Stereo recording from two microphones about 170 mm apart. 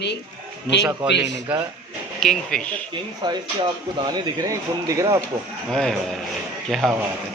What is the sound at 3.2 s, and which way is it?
Speech, 25° right (ahead or behind).